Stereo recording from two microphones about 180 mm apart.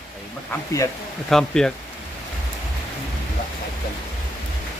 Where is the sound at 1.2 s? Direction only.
5° left (ahead or behind).